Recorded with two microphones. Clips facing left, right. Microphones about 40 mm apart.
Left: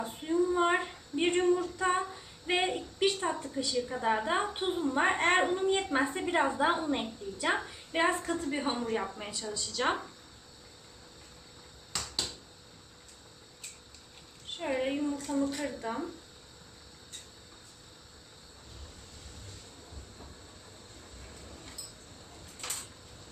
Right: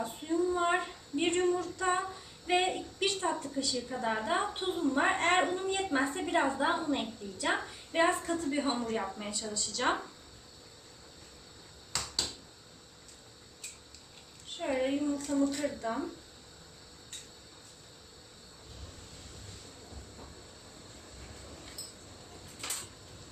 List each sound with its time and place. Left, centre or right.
0.0 s female singing: centre
5.5 s a woman's voice: centre
14.6 s a woman's voice: centre
22.6 s a sound: centre